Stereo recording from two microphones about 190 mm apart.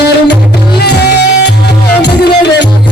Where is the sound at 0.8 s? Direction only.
60° left (ahead or behind).